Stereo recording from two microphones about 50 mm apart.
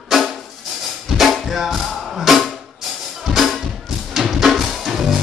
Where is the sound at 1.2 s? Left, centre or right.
Centre.